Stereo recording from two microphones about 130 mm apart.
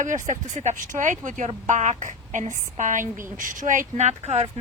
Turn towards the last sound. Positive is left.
turn(degrees=-55)  # may be behind; listen again after turning